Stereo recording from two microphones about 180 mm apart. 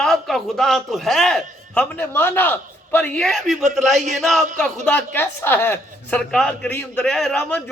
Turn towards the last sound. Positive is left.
turn(degrees=5)  # may be behind; listen again after turning